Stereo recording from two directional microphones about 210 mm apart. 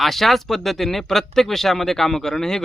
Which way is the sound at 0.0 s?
Centre (ahead or behind).